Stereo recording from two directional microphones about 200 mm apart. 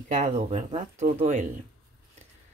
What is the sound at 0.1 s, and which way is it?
A woman's voice, 35° right (ahead or behind).